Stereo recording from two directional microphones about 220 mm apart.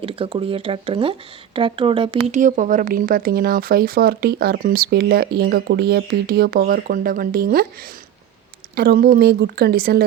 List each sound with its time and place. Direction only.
0.0 s speech: 25° right (ahead or behind); by 7.7 s 45° right (ahead or behind)
8.7 s speech: 45° right (ahead or behind)